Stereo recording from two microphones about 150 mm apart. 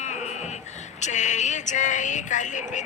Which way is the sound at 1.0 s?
50° left (ahead or behind).